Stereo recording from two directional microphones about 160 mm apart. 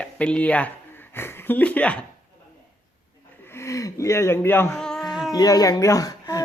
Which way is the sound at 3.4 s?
15° left (ahead or behind).